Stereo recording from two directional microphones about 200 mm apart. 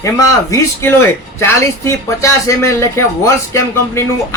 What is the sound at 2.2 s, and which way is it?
Speech, 15° left (ahead or behind).